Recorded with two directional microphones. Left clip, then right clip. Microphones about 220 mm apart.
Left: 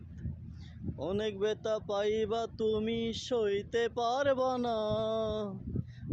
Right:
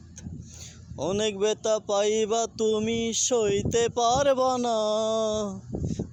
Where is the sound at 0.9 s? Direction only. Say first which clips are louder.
Right 7 dB; 45° right (ahead or behind).